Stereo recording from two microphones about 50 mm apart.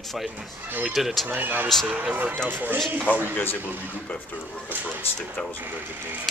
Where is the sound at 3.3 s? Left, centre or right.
Left.